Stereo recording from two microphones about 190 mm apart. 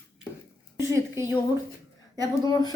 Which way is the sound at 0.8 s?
15° right (ahead or behind).